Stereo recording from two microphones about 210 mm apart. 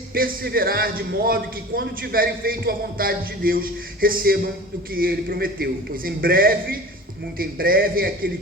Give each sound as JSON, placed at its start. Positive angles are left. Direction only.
{"t": 0.1, "sound": "a man's voice", "side_deg": -45}